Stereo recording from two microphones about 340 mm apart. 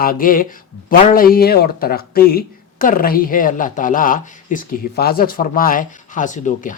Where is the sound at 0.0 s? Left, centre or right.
Left.